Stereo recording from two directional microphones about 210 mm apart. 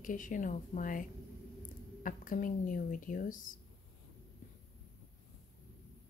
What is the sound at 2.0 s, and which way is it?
A woman's voice, 40° left (ahead or behind).